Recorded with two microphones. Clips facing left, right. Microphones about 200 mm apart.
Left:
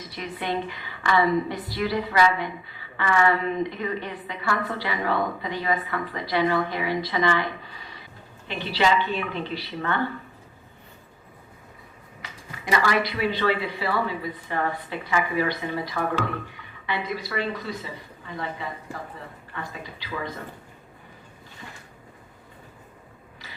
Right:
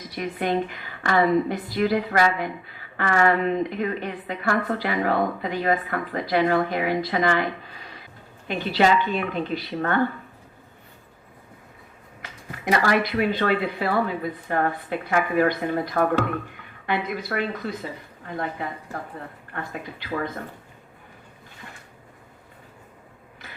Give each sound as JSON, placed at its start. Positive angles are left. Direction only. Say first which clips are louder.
{"t": 0.2, "sound": "a woman's voice", "louder": "right 5 dB", "side_deg": -45}
{"t": 12.5, "sound": "a woman's voice", "louder": "right 3 dB", "side_deg": -55}